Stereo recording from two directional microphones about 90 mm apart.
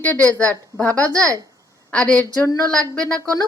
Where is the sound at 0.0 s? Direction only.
15° left (ahead or behind).